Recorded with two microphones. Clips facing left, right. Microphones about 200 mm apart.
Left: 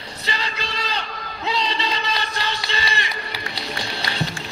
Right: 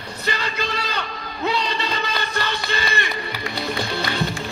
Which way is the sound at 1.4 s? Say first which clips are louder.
Right 1 dB; 50° right (ahead or behind).